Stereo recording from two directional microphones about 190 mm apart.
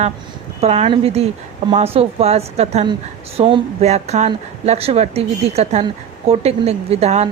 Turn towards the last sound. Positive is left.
turn(degrees=-35)  # may be behind; listen again after turning